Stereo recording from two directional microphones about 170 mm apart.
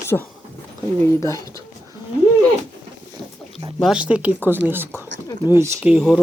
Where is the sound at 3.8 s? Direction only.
5° right (ahead or behind).